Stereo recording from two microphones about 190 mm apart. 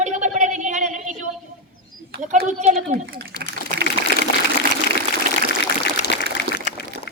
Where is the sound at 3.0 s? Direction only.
55° right (ahead or behind).